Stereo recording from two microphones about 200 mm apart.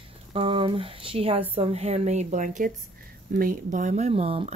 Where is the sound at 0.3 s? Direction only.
25° right (ahead or behind).